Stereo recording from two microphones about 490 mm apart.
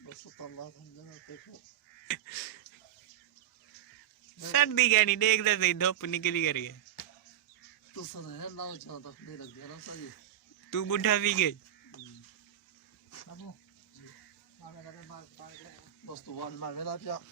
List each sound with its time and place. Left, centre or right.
0.1 s a sound: left
2.0 s a sound: left
4.4 s a man's voice: left
8.1 s a man's voice: left
10.7 s a man's voice: left
16.6 s a man's voice: left